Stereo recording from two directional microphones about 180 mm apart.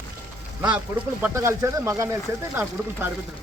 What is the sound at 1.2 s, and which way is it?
Speech, 15° right (ahead or behind).